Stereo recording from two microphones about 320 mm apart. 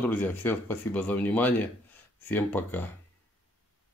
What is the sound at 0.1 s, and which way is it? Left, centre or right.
Music, centre.